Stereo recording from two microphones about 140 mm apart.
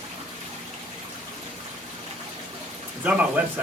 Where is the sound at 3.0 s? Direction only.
10° right (ahead or behind).